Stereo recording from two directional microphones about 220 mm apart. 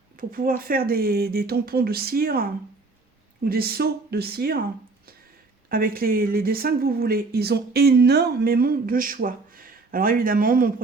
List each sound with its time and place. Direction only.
0.2 s speech: 40° right (ahead or behind)
5.6 s speech: 40° right (ahead or behind)